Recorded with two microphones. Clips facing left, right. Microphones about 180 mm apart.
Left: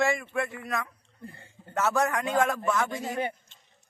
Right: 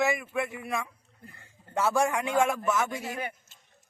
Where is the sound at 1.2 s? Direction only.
30° left (ahead or behind).